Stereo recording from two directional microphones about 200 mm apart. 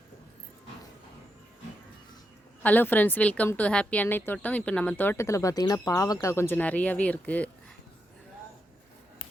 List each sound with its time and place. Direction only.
2.6 s speech: 10° left (ahead or behind)